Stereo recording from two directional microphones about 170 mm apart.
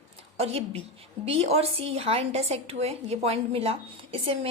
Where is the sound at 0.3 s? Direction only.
35° right (ahead or behind).